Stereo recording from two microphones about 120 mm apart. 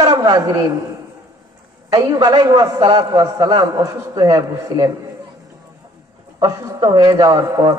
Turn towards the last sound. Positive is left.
turn(degrees=-35)  # may be behind; listen again after turning